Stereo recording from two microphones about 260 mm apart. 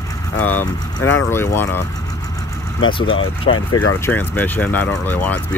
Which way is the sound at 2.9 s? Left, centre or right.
Centre.